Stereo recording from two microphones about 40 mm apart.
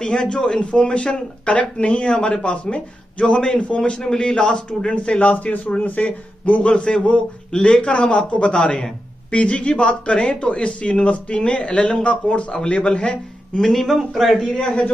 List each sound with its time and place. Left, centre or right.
0.0 s speech: centre
13.6 s speech: centre
14.4 s a man's voice: centre